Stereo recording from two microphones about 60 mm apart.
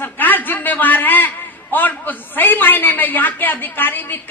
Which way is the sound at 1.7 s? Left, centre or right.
Left.